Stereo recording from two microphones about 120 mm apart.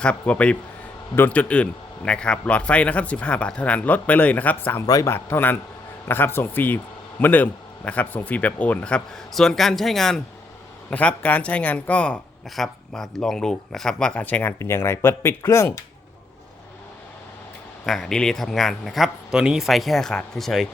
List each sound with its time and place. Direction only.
0.0 s speech: 10° left (ahead or behind)
4.9 s speech: 30° left (ahead or behind)
5.1 s speech: 15° left (ahead or behind)
17.8 s speech: centre (ahead or behind)